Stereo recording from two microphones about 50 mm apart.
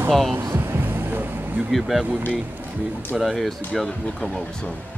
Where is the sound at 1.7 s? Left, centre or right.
Centre.